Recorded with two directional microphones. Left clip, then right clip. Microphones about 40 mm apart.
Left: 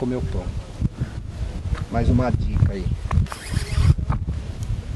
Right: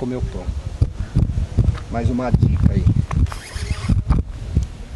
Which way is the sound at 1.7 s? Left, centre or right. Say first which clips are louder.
Left 2 dB; right.